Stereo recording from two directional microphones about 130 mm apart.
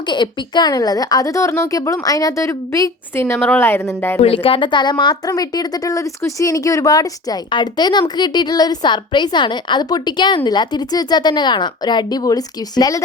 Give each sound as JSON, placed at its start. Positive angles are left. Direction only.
{"t": 0.1, "sound": "a woman's voice", "side_deg": 35}
{"t": 4.2, "sound": "a woman's voice", "side_deg": 45}